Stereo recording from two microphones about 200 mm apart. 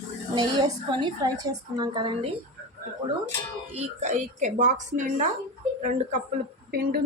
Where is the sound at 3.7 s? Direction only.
35° right (ahead or behind).